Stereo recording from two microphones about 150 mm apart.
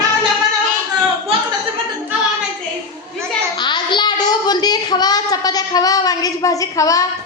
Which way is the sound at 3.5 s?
30° left (ahead or behind).